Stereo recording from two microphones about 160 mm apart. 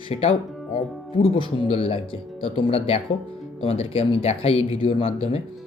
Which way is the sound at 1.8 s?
35° left (ahead or behind).